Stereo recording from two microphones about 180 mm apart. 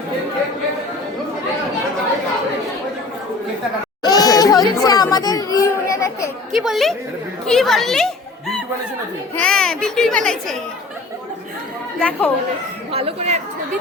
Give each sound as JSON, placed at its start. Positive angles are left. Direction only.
{"t": 4.0, "sound": "chatter", "side_deg": 20}
{"t": 6.5, "sound": "a child's voice", "side_deg": 0}
{"t": 11.9, "sound": "speech", "side_deg": 10}
{"t": 12.9, "sound": "speech", "side_deg": -35}